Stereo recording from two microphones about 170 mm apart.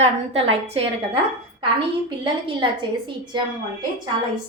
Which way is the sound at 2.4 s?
30° right (ahead or behind).